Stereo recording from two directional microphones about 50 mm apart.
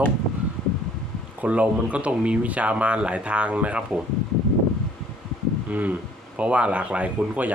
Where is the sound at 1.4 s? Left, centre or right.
Right.